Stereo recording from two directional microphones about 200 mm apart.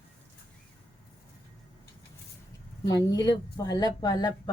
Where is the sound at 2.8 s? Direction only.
20° left (ahead or behind).